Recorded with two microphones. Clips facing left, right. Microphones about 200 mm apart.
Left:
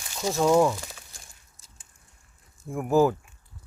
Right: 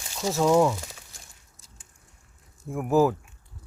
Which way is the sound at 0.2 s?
5° right (ahead or behind).